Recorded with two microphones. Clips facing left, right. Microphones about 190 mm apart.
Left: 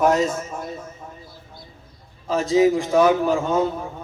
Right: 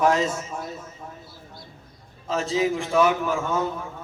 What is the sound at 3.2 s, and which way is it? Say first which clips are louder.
Speech: left 5 dB; 35° left (ahead or behind).